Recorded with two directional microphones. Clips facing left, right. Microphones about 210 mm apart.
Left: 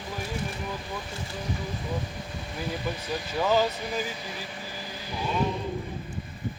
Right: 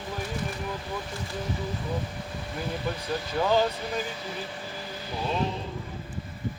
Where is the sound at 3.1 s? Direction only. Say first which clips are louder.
Even; 10° left (ahead or behind).